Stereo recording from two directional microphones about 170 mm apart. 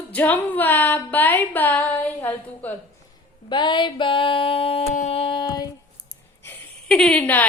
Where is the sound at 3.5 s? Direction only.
25° left (ahead or behind).